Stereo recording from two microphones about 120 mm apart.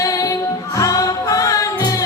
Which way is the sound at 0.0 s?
30° left (ahead or behind).